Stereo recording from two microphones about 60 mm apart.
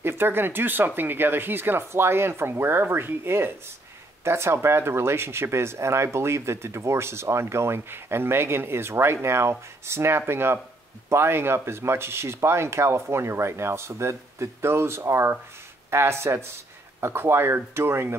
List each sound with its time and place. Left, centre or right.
0.0 s speech: right